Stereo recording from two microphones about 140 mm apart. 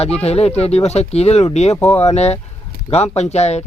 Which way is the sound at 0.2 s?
50° left (ahead or behind).